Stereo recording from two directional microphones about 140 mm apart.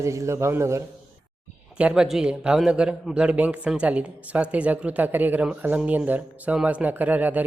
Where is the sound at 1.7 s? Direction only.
5° right (ahead or behind).